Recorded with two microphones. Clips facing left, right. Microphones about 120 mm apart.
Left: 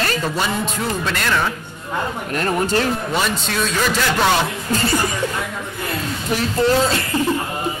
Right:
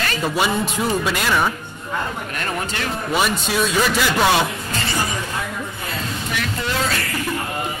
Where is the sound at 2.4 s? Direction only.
35° left (ahead or behind).